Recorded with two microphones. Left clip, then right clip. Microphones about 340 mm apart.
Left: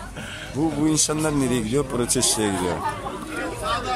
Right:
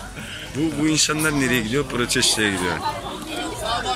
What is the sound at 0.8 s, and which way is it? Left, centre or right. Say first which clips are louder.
A man's voice: right 4 dB; centre.